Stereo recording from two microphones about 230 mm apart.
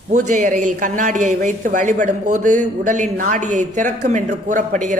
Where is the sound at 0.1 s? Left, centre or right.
Right.